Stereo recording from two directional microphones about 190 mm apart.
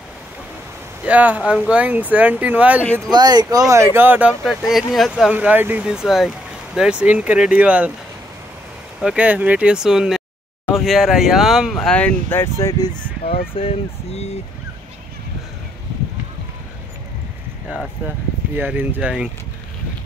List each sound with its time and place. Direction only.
1.0 s speech: 10° right (ahead or behind)
2.8 s speech: 10° left (ahead or behind)
3.1 s speech: 20° right (ahead or behind)
9.0 s speech: 5° right (ahead or behind); by 12.9 s 15° left (ahead or behind)
13.2 s speech: 30° left (ahead or behind)
17.6 s speech: 5° right (ahead or behind)